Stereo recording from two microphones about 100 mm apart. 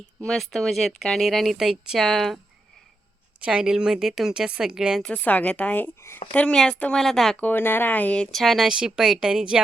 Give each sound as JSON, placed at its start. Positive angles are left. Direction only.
{"t": 0.2, "sound": "speech", "side_deg": 5}
{"t": 3.4, "sound": "speech", "side_deg": -10}
{"t": 5.0, "sound": "speech", "side_deg": 15}
{"t": 6.3, "sound": "speech", "side_deg": 10}
{"t": 7.3, "sound": "speech", "side_deg": 15}